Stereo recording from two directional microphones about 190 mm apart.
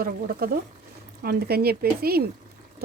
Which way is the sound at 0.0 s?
50° right (ahead or behind).